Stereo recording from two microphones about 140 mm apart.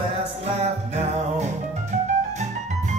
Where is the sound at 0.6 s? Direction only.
55° right (ahead or behind).